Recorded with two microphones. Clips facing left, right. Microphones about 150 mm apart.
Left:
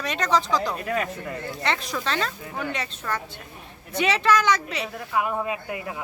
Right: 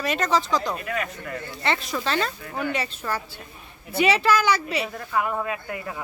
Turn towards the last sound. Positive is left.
turn(degrees=15)  # may be behind; listen again after turning